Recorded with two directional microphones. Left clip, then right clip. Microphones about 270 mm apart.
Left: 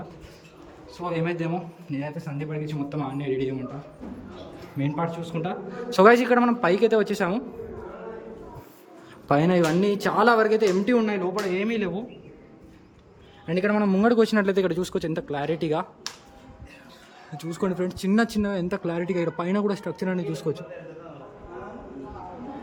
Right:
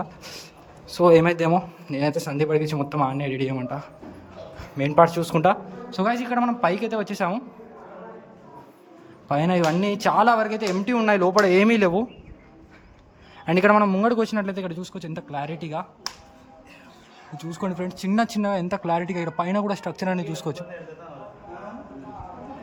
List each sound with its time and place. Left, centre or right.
1.0 s speech: centre
2.9 s speech: centre
4.8 s speech: centre
5.9 s speech: centre
9.3 s speech: centre
11.1 s speech: centre
13.4 s speech: centre
17.3 s speech: centre